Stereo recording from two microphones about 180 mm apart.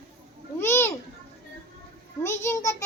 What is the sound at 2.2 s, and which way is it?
Speech, 15° left (ahead or behind).